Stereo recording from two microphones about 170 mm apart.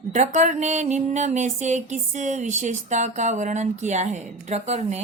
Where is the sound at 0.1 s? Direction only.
45° right (ahead or behind).